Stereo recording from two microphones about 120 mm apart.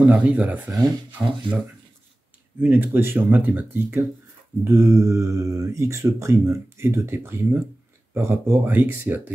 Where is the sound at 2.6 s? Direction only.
15° right (ahead or behind).